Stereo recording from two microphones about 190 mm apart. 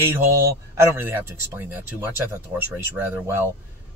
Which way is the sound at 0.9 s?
10° right (ahead or behind).